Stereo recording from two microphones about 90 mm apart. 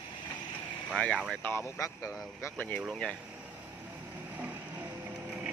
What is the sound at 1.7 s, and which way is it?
Speech, 35° left (ahead or behind).